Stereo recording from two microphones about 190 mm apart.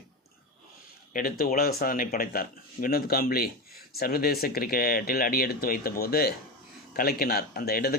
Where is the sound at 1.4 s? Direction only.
50° left (ahead or behind).